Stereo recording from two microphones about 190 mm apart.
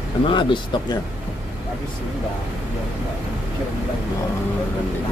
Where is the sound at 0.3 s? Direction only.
25° left (ahead or behind).